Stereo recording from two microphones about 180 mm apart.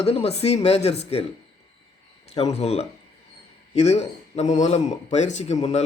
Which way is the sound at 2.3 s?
35° left (ahead or behind).